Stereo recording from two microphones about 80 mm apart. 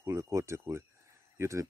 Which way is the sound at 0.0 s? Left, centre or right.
Right.